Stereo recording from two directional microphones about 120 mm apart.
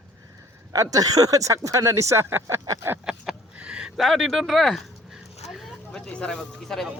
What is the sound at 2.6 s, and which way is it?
Speech, 30° right (ahead or behind).